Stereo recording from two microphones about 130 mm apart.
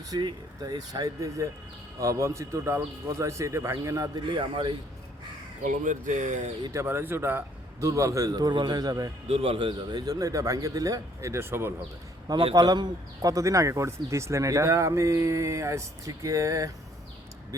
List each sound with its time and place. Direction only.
0.1 s speech: 30° right (ahead or behind)
5.6 s speech: 75° right (ahead or behind)
6.7 s speech: 20° right (ahead or behind)
9.2 s speech: 50° right (ahead or behind); by 11.7 s 20° right (ahead or behind)
12.5 s speech: 30° right (ahead or behind)